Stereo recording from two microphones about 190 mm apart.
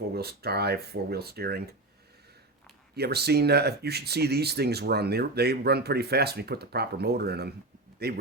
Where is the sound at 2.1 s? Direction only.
60° right (ahead or behind).